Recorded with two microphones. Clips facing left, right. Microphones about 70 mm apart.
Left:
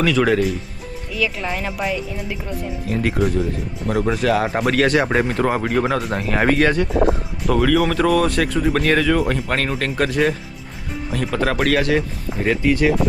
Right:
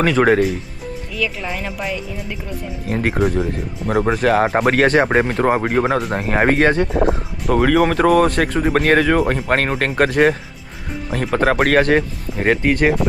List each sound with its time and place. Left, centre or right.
0.0 s speech: right
1.1 s speech: centre
2.8 s speech: right